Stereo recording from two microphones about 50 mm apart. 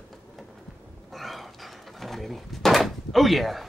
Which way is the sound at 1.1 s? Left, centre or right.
Centre.